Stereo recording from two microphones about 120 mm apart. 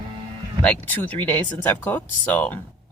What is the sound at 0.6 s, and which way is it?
Speech, 15° left (ahead or behind).